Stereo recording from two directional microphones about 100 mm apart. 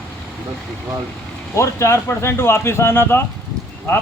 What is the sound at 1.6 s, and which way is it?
Speech, 30° left (ahead or behind).